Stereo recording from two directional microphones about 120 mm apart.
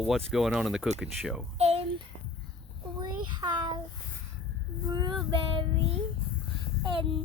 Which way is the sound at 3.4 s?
25° right (ahead or behind).